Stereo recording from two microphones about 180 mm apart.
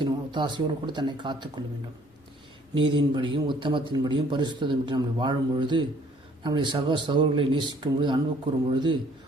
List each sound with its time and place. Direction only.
0.0 s a man's voice: 25° right (ahead or behind)
2.7 s a man's voice: 30° right (ahead or behind)